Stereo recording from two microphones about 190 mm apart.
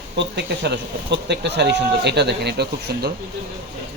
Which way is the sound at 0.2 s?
60° right (ahead or behind).